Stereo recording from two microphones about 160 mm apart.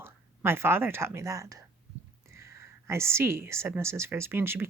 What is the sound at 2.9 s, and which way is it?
Speech, 15° right (ahead or behind).